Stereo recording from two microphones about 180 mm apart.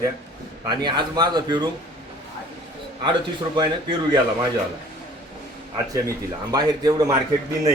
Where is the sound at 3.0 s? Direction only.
25° right (ahead or behind).